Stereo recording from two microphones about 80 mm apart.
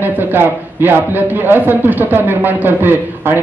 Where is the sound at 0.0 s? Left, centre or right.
Right.